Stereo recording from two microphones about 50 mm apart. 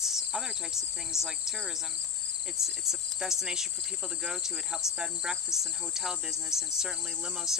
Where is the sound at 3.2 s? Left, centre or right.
Centre.